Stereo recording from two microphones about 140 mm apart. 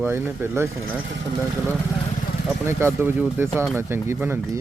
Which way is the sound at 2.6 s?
15° right (ahead or behind).